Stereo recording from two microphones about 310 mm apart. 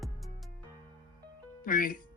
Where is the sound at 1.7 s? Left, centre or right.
Left.